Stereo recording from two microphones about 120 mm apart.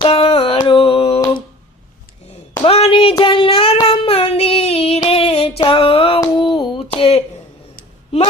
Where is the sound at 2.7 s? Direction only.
55° left (ahead or behind).